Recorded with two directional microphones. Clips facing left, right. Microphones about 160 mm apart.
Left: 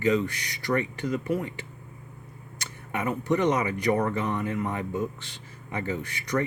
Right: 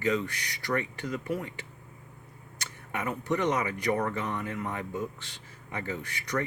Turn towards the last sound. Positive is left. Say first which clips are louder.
# left 4 dB
turn(degrees=20)  # may be behind; listen again after turning